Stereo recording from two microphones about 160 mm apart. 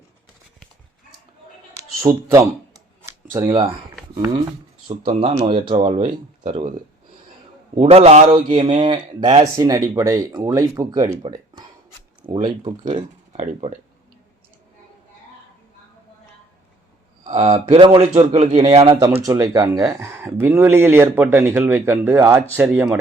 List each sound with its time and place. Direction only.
2.0 s speech: 20° right (ahead or behind)
4.9 s speech: 40° right (ahead or behind)
7.8 s speech: 40° right (ahead or behind)
8.3 s speech: 30° right (ahead or behind)
13.3 s speech: 45° right (ahead or behind)
17.2 s speech: 45° right (ahead or behind)
19.2 s speech: 20° right (ahead or behind)